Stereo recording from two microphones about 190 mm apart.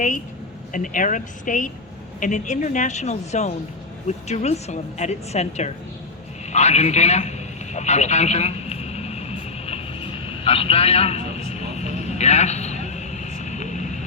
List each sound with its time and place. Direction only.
0.7 s a woman's voice: 45° left (ahead or behind)
6.5 s radio: 35° left (ahead or behind)